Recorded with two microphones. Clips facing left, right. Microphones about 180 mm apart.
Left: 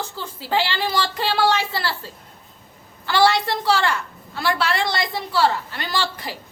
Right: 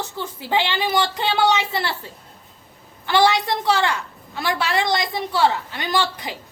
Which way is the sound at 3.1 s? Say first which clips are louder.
Even; 20° right (ahead or behind).